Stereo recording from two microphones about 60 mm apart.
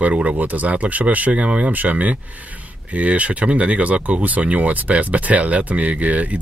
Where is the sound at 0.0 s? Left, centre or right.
Right.